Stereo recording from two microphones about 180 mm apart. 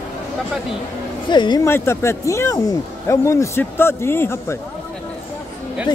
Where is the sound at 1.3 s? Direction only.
25° left (ahead or behind).